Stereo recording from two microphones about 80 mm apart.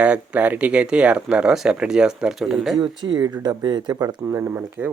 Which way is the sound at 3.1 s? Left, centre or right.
Right.